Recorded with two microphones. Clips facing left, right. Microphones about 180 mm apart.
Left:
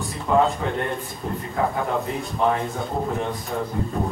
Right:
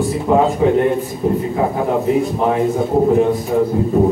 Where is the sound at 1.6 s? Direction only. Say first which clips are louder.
Right 5 dB; 15° right (ahead or behind).